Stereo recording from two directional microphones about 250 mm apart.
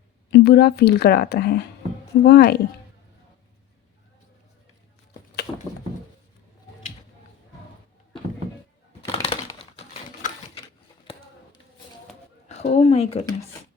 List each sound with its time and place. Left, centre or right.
0.3 s speech: left
9.0 s typewriter: left
12.5 s speech: left